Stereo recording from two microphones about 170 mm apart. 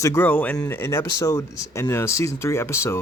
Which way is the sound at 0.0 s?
15° left (ahead or behind).